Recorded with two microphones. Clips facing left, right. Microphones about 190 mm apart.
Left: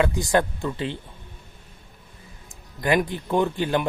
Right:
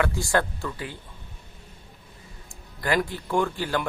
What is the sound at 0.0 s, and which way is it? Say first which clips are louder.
Speech: left 3 dB; 20° left (ahead or behind).